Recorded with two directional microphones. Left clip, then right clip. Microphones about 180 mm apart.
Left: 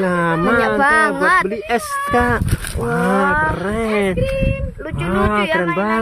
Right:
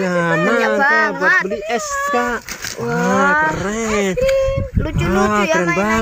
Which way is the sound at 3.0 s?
Centre (ahead or behind).